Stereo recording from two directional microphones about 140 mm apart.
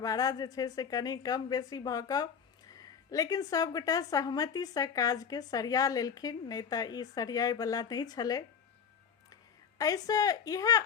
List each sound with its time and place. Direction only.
0.0 s a woman's voice: 25° left (ahead or behind)